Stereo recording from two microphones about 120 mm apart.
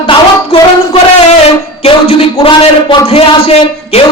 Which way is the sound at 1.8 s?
55° left (ahead or behind).